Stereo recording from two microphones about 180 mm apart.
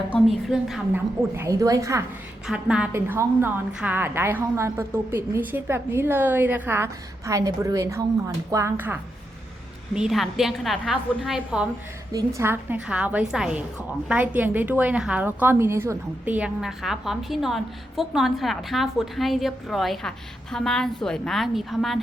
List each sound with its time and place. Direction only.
0.1 s a woman's voice: centre (ahead or behind)
1.4 s a woman's voice: 20° right (ahead or behind)
2.5 s a woman's voice: 5° right (ahead or behind)
9.9 s a woman's voice: centre (ahead or behind)